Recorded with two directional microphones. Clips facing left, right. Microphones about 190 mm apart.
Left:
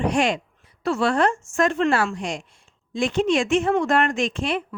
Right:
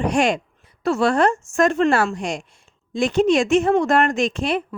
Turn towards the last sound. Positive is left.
turn(degrees=-40)  # may be behind; listen again after turning